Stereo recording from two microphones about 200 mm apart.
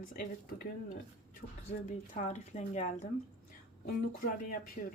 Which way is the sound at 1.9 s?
35° left (ahead or behind).